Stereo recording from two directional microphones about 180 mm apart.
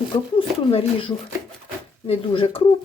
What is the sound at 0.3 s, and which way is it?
Speech, 30° left (ahead or behind).